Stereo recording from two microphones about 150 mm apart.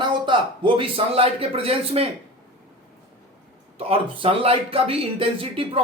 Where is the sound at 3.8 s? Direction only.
35° right (ahead or behind).